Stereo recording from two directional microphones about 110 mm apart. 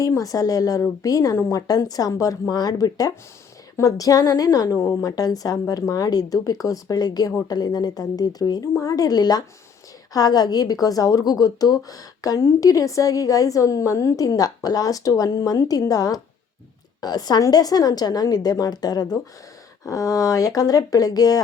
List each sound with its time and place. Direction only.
0.0 s a woman's voice: 30° left (ahead or behind)
4.8 s speech: 20° left (ahead or behind)
5.0 s a woman's voice: 35° left (ahead or behind)